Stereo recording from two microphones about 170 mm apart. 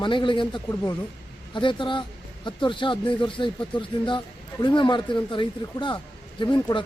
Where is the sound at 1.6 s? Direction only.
30° left (ahead or behind).